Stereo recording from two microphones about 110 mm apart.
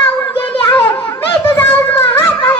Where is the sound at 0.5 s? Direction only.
50° left (ahead or behind).